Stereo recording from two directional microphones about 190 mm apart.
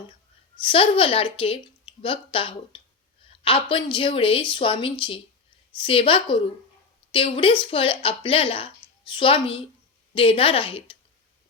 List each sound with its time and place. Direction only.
0.6 s speech: 30° left (ahead or behind)